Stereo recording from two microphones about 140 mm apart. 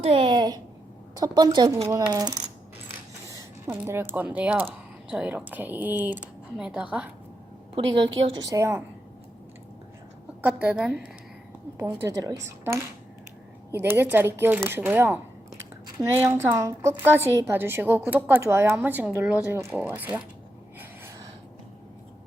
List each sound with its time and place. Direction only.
0.0 s a child's voice: 40° right (ahead or behind)
3.7 s a woman's voice: 15° right (ahead or behind)
8.4 s speech: 20° right (ahead or behind)
10.4 s a woman's voice: 10° right (ahead or behind)
11.9 s a woman's voice: 25° right (ahead or behind)